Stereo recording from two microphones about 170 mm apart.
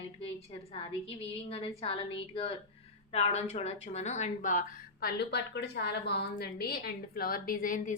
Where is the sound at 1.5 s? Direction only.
35° left (ahead or behind).